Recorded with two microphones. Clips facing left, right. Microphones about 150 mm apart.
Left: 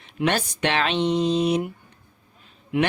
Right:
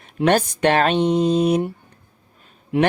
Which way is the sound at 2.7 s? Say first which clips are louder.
Right 4 dB; 35° right (ahead or behind).